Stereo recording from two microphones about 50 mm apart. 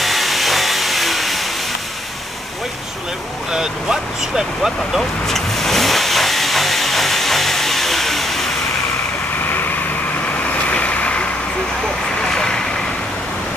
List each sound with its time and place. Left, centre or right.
0.0 s vehicle: centre
3.5 s speech: centre
5.2 s vehicle: centre
10.7 s vehicle: left
12.2 s vehicle: centre